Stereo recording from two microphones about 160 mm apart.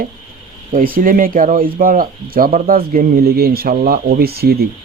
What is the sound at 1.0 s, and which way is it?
Speech, 60° right (ahead or behind).